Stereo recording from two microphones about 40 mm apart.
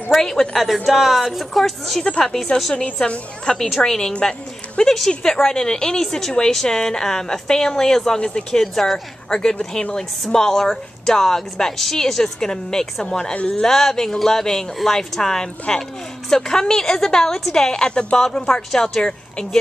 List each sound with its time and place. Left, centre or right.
0.2 s a woman's voice: centre
0.8 s speech: centre
1.6 s a woman's voice: centre
3.5 s speech: left
3.8 s a woman's voice: centre
17.7 s a woman's voice: left